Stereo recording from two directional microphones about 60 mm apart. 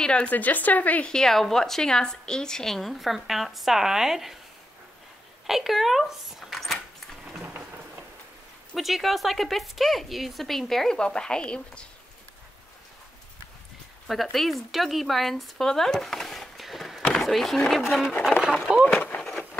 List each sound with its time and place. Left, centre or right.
0.0 s a woman's voice: centre
0.3 s a woman's voice: left
1.0 s a woman's voice: centre
5.5 s speech: centre
8.7 s a woman's voice: centre
14.0 s speech: centre
18.7 s speech: centre
18.9 s speech: left